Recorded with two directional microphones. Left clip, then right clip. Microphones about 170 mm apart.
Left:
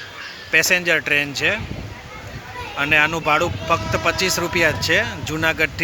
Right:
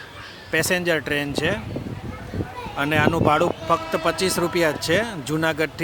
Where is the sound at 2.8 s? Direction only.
30° right (ahead or behind).